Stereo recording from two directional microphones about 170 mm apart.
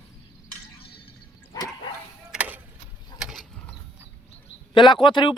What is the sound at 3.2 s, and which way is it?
Mechanisms, centre (ahead or behind).